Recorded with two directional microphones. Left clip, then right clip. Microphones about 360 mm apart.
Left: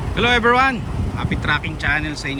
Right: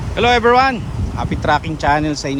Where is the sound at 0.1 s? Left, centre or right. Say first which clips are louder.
Right 3 dB; centre.